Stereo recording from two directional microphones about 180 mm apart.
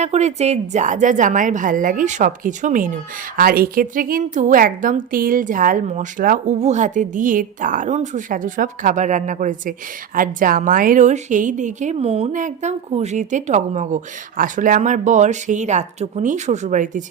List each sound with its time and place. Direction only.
0.0 s a woman's voice: 40° right (ahead or behind)